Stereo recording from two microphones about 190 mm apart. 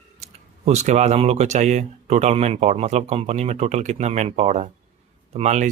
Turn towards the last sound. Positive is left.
turn(degrees=-35)  # may be behind; listen again after turning